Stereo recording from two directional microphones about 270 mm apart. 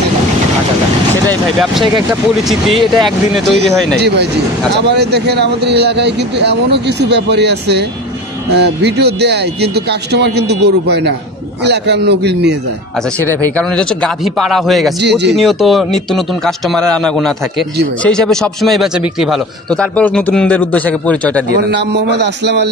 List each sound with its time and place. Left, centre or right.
2.4 s a man's voice: centre
4.0 s speech: right
13.2 s a man's voice: centre
15.0 s speech: right
15.3 s a man's voice: centre
21.5 s speech: right